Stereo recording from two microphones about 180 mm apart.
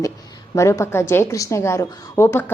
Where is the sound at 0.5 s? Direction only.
15° left (ahead or behind).